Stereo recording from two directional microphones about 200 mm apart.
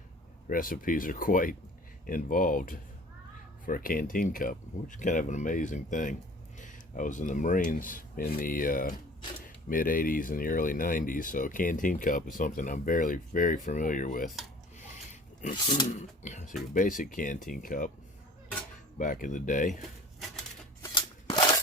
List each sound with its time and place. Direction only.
0.4 s speech: 45° left (ahead or behind)
14.8 s a sound: 35° left (ahead or behind)
15.9 s speech: 35° left (ahead or behind)
18.9 s speech: 40° left (ahead or behind)
20.8 s scissors: 20° left (ahead or behind)